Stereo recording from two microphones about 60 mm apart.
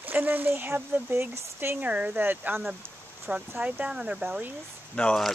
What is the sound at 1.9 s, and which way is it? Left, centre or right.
Speech, right.